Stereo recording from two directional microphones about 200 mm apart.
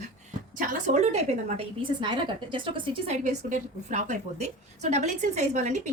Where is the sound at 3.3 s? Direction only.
40° right (ahead or behind).